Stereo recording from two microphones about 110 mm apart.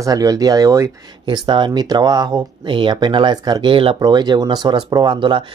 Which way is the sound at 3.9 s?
40° right (ahead or behind).